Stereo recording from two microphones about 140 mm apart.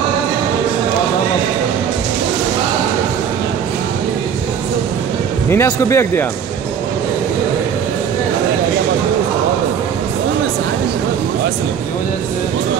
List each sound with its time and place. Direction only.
5.5 s speech: 20° left (ahead or behind)